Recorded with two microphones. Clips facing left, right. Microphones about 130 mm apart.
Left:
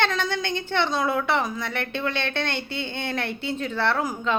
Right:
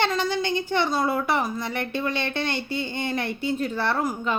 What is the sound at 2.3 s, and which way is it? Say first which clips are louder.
Speech: right 1 dB; 60° left (ahead or behind).